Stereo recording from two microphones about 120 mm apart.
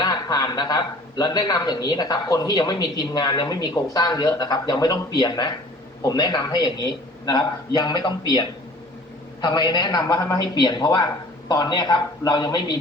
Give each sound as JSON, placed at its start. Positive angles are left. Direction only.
{"t": 0.0, "sound": "a man's voice", "side_deg": 35}